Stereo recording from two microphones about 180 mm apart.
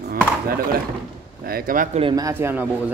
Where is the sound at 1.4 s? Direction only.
55° right (ahead or behind).